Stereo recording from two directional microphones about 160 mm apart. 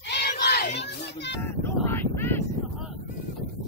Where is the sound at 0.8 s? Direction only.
90° left.